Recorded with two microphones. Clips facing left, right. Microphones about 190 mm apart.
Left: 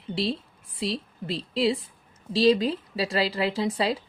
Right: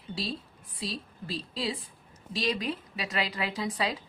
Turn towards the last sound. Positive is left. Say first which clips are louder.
# left 6 dB
turn(degrees=30)  # may be behind; listen again after turning